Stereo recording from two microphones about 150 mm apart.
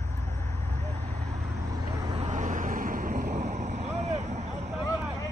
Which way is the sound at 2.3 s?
55° right (ahead or behind).